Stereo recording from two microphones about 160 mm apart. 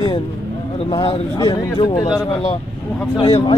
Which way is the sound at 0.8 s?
35° left (ahead or behind).